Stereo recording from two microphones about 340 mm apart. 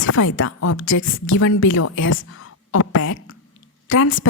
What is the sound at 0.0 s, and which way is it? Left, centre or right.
A woman's voice, left.